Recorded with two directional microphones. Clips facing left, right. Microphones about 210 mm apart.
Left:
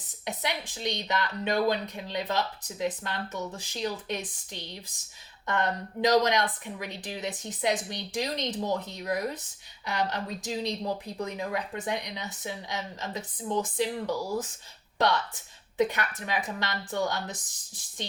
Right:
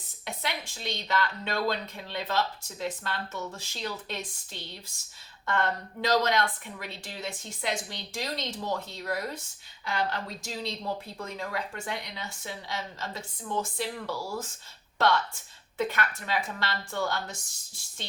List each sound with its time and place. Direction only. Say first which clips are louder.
0.3 s speech: left 3 dB; 15° left (ahead or behind)